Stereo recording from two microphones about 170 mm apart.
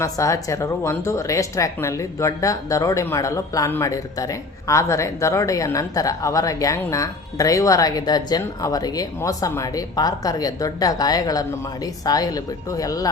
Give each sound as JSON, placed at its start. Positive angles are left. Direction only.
{"t": 0.0, "sound": "speech", "side_deg": 20}